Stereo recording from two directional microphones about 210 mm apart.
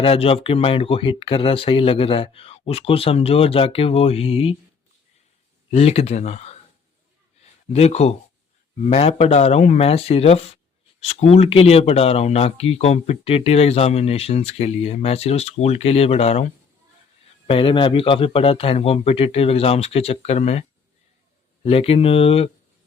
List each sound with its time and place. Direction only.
0.0 s speech: 25° left (ahead or behind)
5.7 s speech: 30° left (ahead or behind)
7.7 s speech: 30° left (ahead or behind)